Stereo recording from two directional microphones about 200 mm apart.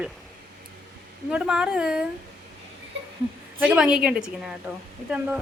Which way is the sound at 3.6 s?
5° right (ahead or behind).